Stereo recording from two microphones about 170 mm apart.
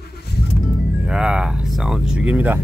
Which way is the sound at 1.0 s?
5° right (ahead or behind).